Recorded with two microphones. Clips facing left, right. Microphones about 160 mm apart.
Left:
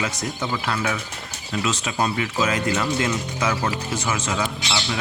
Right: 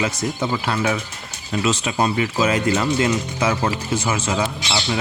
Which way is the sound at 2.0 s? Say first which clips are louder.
Right 2 dB; 25° right (ahead or behind).